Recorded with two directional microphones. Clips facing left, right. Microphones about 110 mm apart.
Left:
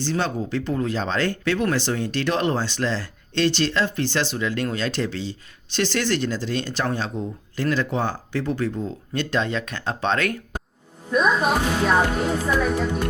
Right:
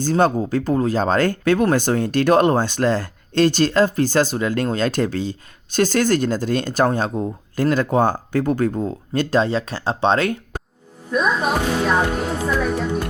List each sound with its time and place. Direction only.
0.0 s speech: 45° right (ahead or behind)
11.1 s a woman's voice: centre (ahead or behind)